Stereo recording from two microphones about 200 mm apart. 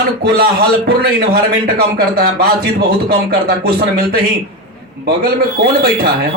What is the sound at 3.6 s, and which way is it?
A man's voice, 50° right (ahead or behind).